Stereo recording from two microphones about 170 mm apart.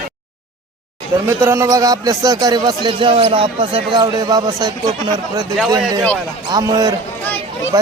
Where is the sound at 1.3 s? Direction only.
15° right (ahead or behind).